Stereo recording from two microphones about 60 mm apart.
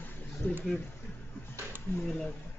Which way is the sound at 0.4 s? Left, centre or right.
Left.